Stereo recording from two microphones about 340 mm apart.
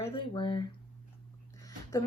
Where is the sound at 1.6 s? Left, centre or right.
Centre.